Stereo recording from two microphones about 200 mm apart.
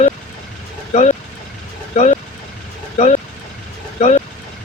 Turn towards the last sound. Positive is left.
turn(degrees=35)  # may be behind; listen again after turning